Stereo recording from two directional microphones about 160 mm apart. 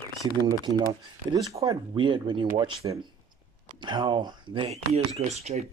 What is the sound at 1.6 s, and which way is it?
Speech, 30° right (ahead or behind).